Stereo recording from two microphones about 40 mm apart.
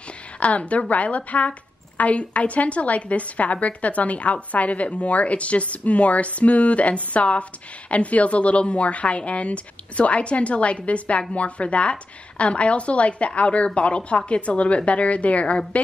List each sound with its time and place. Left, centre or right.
0.4 s a woman's voice: left